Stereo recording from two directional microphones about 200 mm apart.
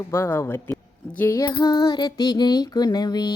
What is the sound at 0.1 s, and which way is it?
Speech, 15° left (ahead or behind).